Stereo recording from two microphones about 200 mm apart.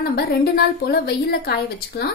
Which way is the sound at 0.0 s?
50° left (ahead or behind).